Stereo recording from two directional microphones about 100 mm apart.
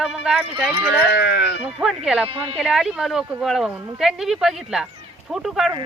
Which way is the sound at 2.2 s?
70° right (ahead or behind).